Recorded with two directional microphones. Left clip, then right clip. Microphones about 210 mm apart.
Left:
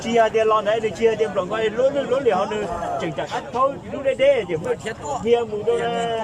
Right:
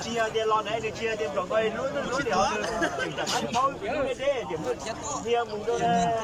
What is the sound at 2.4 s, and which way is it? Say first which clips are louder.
Speech: left 2 dB; 50° right (ahead or behind).